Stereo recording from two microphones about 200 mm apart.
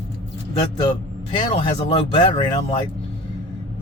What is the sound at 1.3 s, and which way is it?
Speech, 25° left (ahead or behind).